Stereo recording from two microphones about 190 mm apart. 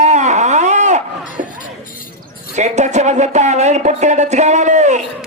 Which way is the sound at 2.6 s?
40° right (ahead or behind).